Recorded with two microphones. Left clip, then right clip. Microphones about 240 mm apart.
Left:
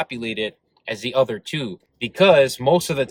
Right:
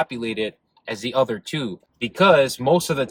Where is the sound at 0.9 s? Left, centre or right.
Left.